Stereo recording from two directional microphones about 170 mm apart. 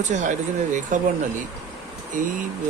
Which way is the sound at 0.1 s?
45° right (ahead or behind).